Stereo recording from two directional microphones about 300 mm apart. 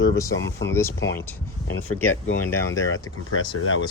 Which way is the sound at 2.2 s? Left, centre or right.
Left.